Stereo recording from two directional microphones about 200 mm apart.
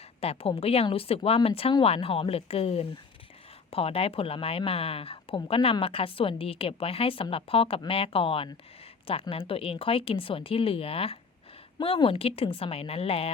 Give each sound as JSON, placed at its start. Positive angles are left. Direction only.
{"t": 0.2, "sound": "speech", "side_deg": 30}